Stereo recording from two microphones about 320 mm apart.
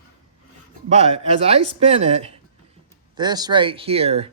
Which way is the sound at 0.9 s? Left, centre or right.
Centre.